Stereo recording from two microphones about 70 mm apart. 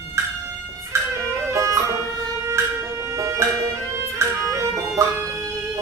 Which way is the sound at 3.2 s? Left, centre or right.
Right.